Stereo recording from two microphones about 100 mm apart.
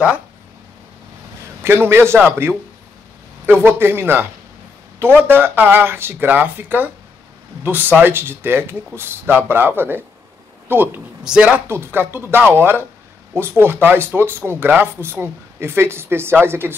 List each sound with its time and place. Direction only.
1.6 s speech: 25° right (ahead or behind)
11.2 s speech: 10° right (ahead or behind)
11.6 s speech: 25° right (ahead or behind)